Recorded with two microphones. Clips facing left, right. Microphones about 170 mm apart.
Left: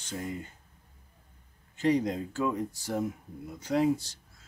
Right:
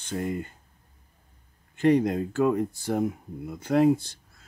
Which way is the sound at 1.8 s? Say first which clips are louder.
Right 5 dB; 60° right (ahead or behind).